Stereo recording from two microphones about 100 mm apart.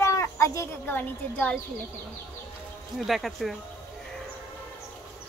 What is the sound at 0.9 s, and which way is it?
Speech, 15° left (ahead or behind).